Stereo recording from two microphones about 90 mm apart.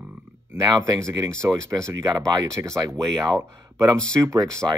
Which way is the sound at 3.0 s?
5° left (ahead or behind).